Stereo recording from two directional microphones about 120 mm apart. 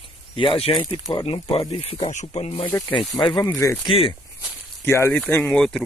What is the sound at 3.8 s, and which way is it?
Speech, 50° left (ahead or behind).